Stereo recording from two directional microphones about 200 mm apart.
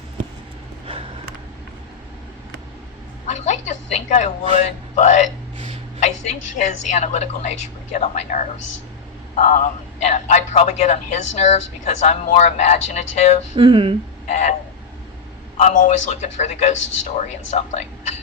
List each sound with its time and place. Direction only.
3.2 s a sound: 35° left (ahead or behind)
4.6 s a man's voice: 35° left (ahead or behind)
6.6 s a man's voice: 35° left (ahead or behind)
13.6 s speech: 25° right (ahead or behind)
14.3 s a man's voice: 35° left (ahead or behind)
15.5 s a man's voice: 35° left (ahead or behind)